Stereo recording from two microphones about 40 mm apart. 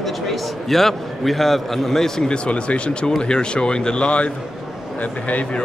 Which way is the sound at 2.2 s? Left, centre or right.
Left.